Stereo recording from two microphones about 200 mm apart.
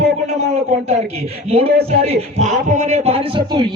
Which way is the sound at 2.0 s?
35° right (ahead or behind).